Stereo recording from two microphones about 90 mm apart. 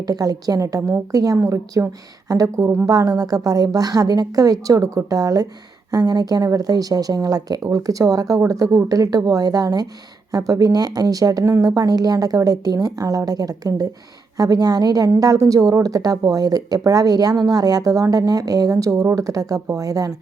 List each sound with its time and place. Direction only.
0.1 s a woman's voice: 45° right (ahead or behind); by 2.8 s 25° right (ahead or behind)
2.8 s speech: 45° right (ahead or behind)